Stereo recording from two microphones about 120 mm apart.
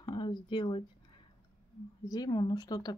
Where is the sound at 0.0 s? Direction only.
40° left (ahead or behind).